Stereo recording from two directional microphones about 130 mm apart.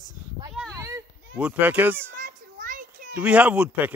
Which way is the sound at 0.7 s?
25° right (ahead or behind).